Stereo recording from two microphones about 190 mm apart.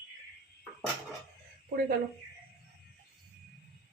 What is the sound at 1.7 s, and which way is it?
Speech, 50° right (ahead or behind).